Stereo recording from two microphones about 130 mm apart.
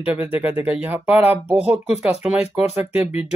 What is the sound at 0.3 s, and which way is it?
Speech, 15° right (ahead or behind).